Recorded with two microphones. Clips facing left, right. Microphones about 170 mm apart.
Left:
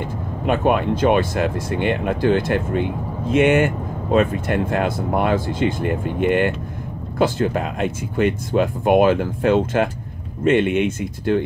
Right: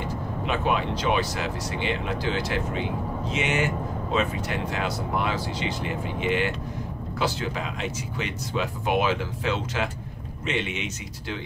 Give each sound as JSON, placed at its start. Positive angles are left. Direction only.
{"t": 0.5, "sound": "speech", "side_deg": 50}